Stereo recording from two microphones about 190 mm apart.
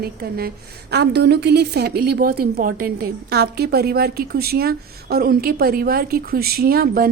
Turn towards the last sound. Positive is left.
turn(degrees=-50)  # may be behind; listen again after turning